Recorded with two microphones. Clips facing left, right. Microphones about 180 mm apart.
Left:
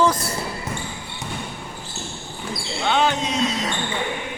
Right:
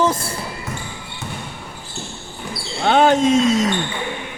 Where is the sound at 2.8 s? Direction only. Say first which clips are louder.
Right 7 dB; 50° right (ahead or behind).